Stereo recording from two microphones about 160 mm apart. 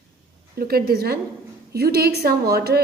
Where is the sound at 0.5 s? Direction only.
70° right (ahead or behind).